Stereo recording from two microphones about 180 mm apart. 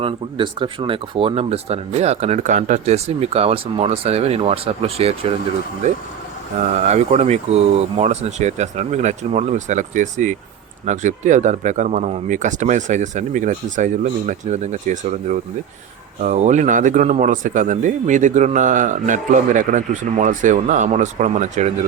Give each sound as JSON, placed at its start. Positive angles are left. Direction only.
{"t": 0.0, "sound": "speech", "side_deg": -25}